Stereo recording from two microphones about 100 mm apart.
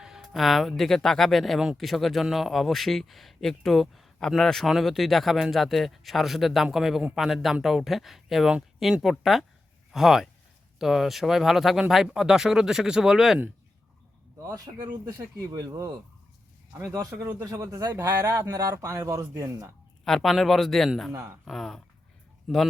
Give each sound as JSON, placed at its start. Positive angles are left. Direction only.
{"t": 0.0, "sound": "a sound", "side_deg": -5}
{"t": 0.8, "sound": "speech", "side_deg": 5}
{"t": 14.4, "sound": "speech", "side_deg": -35}
{"t": 16.7, "sound": "speech", "side_deg": -20}
{"t": 17.4, "sound": "speech", "side_deg": -35}
{"t": 20.1, "sound": "speech", "side_deg": 0}
{"t": 21.1, "sound": "speech", "side_deg": -25}
{"t": 21.4, "sound": "speech", "side_deg": 0}